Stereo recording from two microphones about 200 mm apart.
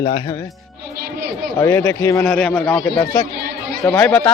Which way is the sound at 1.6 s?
15° left (ahead or behind).